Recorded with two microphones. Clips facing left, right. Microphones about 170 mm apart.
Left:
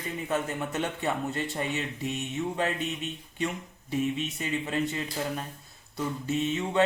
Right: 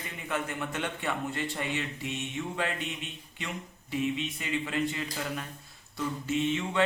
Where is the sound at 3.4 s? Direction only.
45° left (ahead or behind).